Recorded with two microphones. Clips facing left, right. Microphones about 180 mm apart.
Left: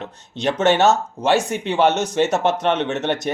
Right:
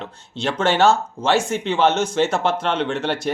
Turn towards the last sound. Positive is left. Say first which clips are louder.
# left 1 dB
turn(degrees=20)  # may be behind; listen again after turning